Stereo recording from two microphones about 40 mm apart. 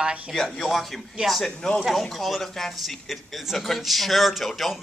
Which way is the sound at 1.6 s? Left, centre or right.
Centre.